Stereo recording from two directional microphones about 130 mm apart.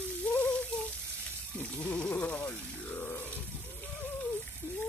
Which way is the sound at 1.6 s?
10° left (ahead or behind).